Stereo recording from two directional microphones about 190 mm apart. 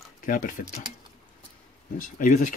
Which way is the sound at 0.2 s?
45° left (ahead or behind).